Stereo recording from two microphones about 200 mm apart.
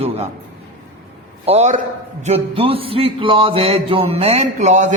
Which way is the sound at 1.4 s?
35° right (ahead or behind).